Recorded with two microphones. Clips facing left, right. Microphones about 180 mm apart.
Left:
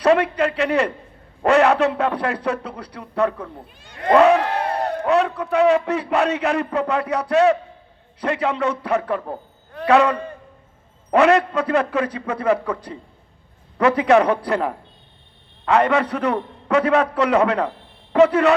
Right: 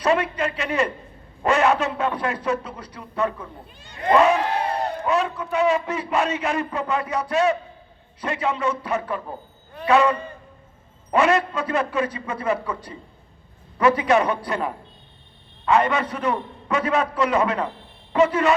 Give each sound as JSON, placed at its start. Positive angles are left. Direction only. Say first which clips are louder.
{"t": 0.0, "sound": "a man's voice", "louder": "left 5 dB", "side_deg": 65}